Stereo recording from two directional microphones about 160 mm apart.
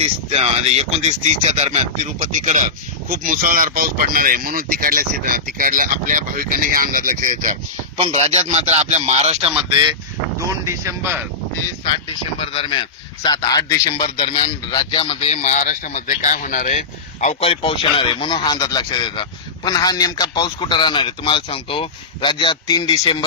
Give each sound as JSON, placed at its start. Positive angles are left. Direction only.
{"t": 0.0, "sound": "speech", "side_deg": -40}
{"t": 7.9, "sound": "a man's voice", "side_deg": -40}
{"t": 10.7, "sound": "speech", "side_deg": -15}
{"t": 12.4, "sound": "a man's voice", "side_deg": 35}